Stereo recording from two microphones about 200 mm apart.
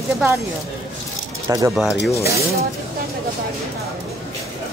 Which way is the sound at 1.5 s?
15° right (ahead or behind).